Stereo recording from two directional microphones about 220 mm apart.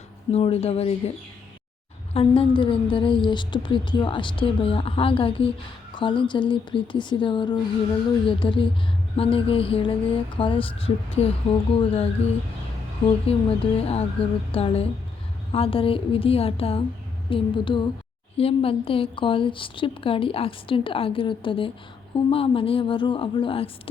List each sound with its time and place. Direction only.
0.3 s a woman's voice: 25° left (ahead or behind)
2.1 s a woman's voice: 25° left (ahead or behind)